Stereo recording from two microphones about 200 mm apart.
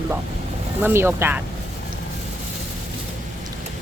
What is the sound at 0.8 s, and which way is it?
Speech, 10° right (ahead or behind).